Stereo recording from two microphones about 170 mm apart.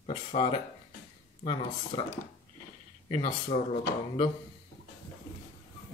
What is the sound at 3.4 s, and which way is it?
Speech, 35° left (ahead or behind).